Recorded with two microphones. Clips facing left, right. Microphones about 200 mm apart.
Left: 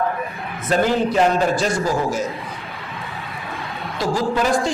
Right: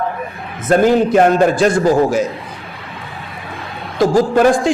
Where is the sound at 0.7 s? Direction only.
50° right (ahead or behind).